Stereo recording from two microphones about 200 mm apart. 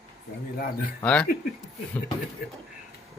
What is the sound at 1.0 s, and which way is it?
Speech, 5° left (ahead or behind).